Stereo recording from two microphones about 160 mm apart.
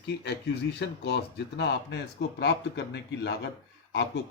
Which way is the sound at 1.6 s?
90° left.